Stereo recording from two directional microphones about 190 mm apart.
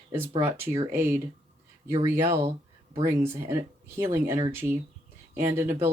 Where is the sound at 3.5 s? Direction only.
15° right (ahead or behind).